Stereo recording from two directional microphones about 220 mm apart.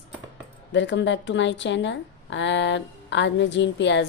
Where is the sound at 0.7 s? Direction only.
55° left (ahead or behind).